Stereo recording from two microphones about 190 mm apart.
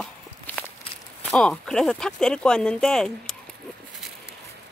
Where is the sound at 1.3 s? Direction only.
5° left (ahead or behind).